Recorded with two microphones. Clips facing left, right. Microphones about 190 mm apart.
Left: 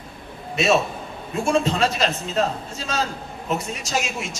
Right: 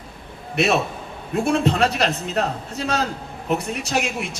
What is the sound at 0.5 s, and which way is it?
A man's voice, 65° right (ahead or behind).